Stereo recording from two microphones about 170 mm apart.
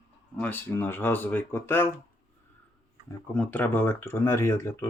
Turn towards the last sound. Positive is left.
turn(degrees=15)  # may be behind; listen again after turning